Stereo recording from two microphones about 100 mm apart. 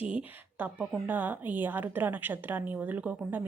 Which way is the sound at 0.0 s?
15° right (ahead or behind).